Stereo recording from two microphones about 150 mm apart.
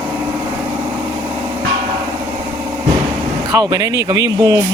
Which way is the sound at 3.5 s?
25° right (ahead or behind).